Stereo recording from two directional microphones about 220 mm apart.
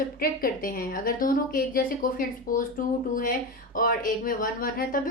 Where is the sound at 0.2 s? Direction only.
40° left (ahead or behind).